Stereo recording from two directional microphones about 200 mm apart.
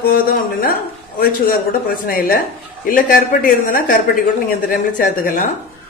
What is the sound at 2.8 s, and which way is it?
A woman's voice, 45° left (ahead or behind).